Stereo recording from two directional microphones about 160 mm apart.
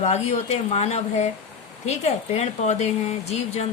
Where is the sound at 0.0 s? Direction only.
45° left (ahead or behind).